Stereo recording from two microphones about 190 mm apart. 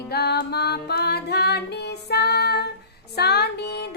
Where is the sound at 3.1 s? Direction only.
60° left (ahead or behind).